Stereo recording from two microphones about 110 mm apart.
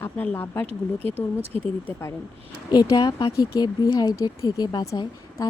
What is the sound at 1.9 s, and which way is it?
Speech, 25° left (ahead or behind).